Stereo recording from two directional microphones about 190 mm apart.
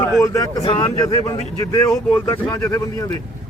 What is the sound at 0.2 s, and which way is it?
A man's voice, 20° left (ahead or behind).